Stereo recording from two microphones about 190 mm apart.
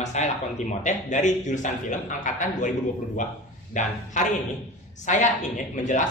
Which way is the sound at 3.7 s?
40° left (ahead or behind).